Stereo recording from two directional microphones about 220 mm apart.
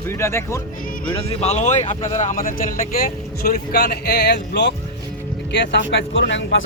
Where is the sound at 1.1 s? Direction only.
25° left (ahead or behind).